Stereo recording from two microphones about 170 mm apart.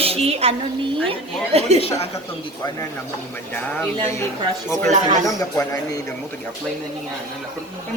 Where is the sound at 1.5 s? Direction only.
35° right (ahead or behind).